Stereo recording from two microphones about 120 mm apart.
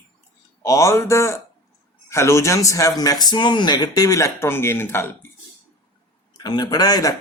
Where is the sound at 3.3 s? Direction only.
40° left (ahead or behind); by 5.3 s 20° left (ahead or behind).